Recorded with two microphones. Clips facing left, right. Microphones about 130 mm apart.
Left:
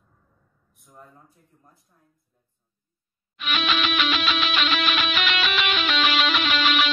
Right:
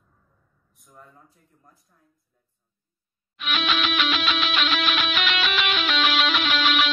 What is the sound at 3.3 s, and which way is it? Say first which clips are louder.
Music: even; centre (ahead or behind).